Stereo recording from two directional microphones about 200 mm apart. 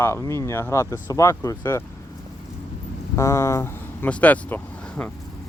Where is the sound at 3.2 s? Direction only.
15° left (ahead or behind).